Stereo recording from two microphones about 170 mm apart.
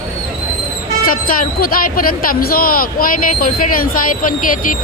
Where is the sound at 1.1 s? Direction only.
55° left (ahead or behind).